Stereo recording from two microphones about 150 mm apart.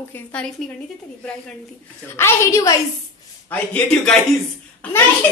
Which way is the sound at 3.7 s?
5° left (ahead or behind).